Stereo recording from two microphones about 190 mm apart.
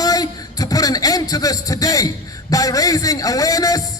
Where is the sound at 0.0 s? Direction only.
20° left (ahead or behind).